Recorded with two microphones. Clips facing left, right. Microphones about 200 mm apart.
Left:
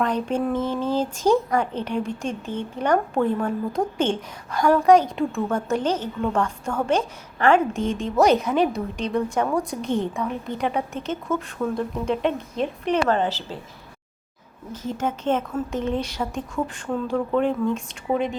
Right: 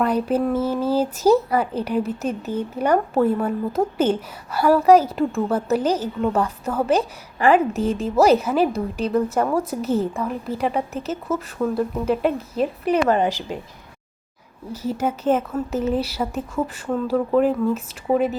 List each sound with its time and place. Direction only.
0.0 s a woman's voice: 5° right (ahead or behind)
14.7 s speech: 10° right (ahead or behind)